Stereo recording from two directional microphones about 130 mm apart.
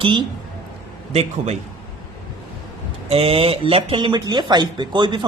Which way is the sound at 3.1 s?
50° right (ahead or behind).